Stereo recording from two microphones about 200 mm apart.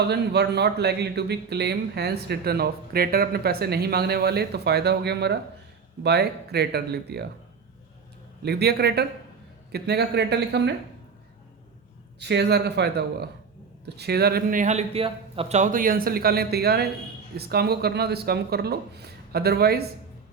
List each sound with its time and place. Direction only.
0.1 s speech: 55° right (ahead or behind)
8.4 s speech: 55° right (ahead or behind)
12.2 s speech: 55° right (ahead or behind)